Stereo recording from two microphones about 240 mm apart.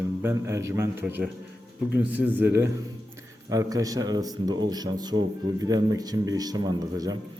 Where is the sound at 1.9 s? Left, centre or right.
Centre.